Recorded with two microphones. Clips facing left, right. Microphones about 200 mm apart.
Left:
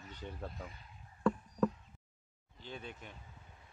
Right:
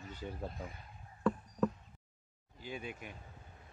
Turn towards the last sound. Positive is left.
turn(degrees=-10)  # may be behind; listen again after turning